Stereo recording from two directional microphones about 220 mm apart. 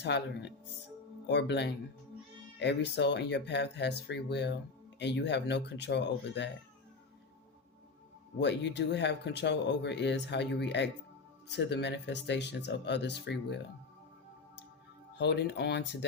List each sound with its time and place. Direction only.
0.0 s speech: 50° left (ahead or behind)
8.4 s speech: 50° left (ahead or behind)
15.2 s speech: 50° left (ahead or behind)